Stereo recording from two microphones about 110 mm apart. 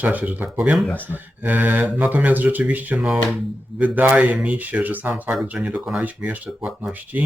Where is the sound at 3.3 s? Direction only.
15° right (ahead or behind).